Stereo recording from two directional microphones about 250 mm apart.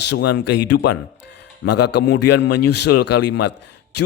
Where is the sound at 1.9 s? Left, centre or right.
Left.